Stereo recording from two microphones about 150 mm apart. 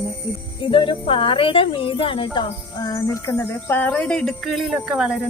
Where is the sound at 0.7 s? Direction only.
35° left (ahead or behind); by 5.1 s 5° right (ahead or behind).